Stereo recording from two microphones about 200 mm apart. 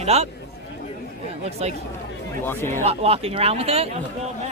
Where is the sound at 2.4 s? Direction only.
10° left (ahead or behind).